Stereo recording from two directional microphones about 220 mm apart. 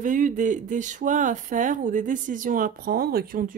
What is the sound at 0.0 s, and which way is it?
Speech, 35° right (ahead or behind).